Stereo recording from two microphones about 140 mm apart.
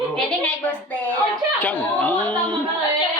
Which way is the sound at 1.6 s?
10° left (ahead or behind).